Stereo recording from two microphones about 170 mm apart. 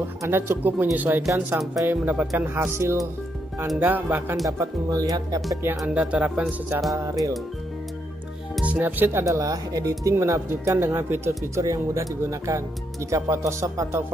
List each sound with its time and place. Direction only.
0.2 s speech: 15° right (ahead or behind)
5.8 s speech: 5° right (ahead or behind)
7.1 s speech: 20° right (ahead or behind)
8.5 s speech: 10° right (ahead or behind)